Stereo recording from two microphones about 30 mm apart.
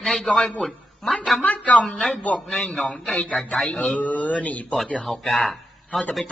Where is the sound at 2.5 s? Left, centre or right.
Left.